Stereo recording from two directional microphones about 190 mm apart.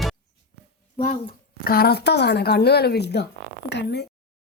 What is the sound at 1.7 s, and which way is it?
Speech, 55° left (ahead or behind).